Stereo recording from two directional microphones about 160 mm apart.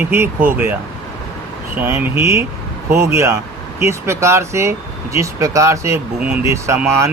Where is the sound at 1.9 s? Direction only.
15° right (ahead or behind).